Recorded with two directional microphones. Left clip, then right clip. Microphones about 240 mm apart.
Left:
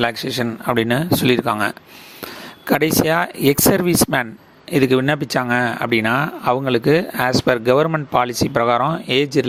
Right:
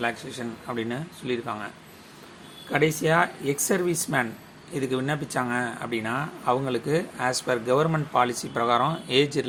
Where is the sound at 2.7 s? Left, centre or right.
Left.